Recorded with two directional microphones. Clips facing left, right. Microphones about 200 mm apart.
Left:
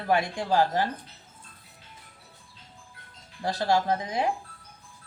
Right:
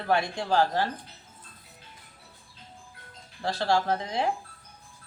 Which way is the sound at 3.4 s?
15° left (ahead or behind).